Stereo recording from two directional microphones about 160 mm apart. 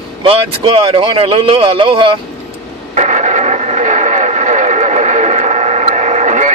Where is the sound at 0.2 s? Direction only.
35° right (ahead or behind).